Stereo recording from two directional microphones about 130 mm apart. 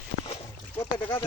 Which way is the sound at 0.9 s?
40° left (ahead or behind).